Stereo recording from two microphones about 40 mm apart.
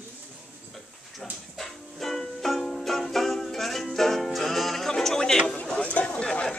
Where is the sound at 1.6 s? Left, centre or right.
Centre.